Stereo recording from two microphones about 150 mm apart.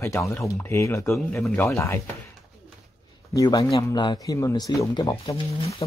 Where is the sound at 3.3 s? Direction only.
25° left (ahead or behind).